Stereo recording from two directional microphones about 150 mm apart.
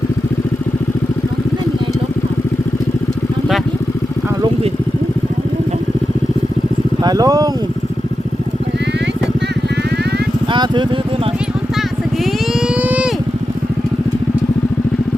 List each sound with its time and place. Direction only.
7.0 s speech: 25° right (ahead or behind)
10.5 s speech: 30° right (ahead or behind)
12.2 s vehicle: 5° right (ahead or behind)